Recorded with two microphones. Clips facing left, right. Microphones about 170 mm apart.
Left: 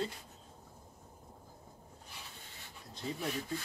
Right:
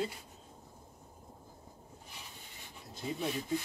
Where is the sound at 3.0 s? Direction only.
15° right (ahead or behind).